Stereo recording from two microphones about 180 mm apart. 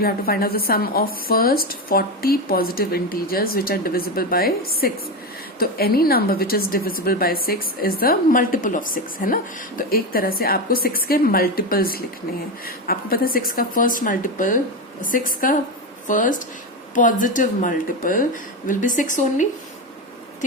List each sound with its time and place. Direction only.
0.0 s a woman's voice: 55° left (ahead or behind)